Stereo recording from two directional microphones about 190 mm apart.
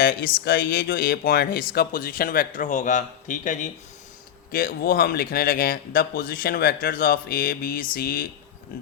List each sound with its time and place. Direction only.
0.0 s a man's voice: 55° left (ahead or behind)